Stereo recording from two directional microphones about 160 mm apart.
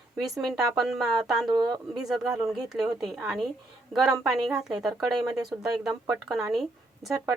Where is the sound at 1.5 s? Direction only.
25° right (ahead or behind).